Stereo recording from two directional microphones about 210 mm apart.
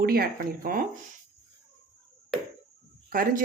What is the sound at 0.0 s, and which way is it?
Speech, 45° right (ahead or behind).